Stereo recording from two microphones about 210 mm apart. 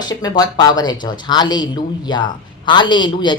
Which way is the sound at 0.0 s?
20° left (ahead or behind).